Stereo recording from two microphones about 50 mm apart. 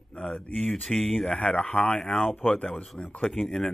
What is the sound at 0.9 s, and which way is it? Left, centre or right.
Speech, centre.